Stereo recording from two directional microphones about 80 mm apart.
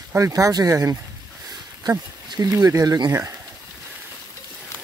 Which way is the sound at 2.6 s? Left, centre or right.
Right.